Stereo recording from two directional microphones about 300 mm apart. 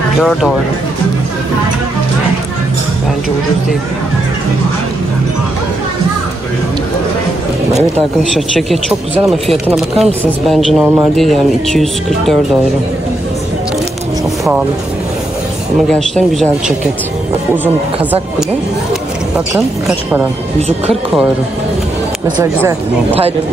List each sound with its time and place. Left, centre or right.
0.2 s speech: centre
7.7 s speech: centre
15.9 s speech: centre
22.4 s speech: centre